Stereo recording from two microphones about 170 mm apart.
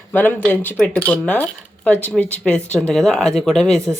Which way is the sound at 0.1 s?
10° left (ahead or behind).